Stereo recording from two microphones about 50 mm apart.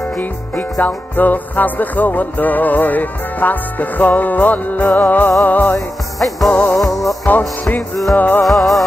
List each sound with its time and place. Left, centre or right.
0.2 s music: left
6.8 s music: centre
7.2 s music: left
8.5 s music: centre